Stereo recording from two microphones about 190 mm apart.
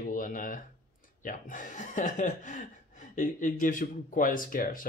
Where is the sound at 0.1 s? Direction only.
45° left (ahead or behind).